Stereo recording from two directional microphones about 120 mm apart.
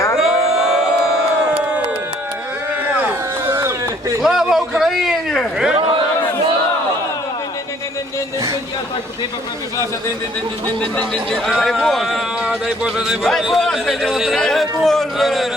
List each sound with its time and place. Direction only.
0.2 s music: 5° right (ahead or behind)
3.1 s a sound: 20° right (ahead or behind)
4.2 s a man's voice: 5° right (ahead or behind)
10.8 s a man's voice: 10° left (ahead or behind)